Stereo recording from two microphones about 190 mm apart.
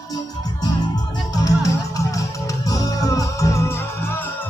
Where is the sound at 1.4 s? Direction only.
15° left (ahead or behind).